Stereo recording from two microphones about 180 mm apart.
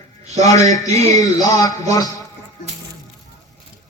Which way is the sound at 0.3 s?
20° left (ahead or behind).